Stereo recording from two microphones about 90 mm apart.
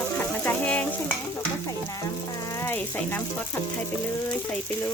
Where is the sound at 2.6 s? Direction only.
25° left (ahead or behind).